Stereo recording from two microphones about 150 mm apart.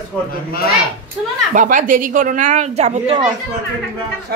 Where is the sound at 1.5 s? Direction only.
55° right (ahead or behind).